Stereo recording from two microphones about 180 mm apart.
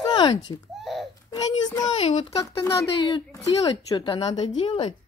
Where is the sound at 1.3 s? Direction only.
20° left (ahead or behind).